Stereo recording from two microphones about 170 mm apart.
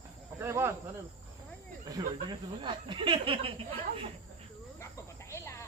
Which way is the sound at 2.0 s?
25° right (ahead or behind).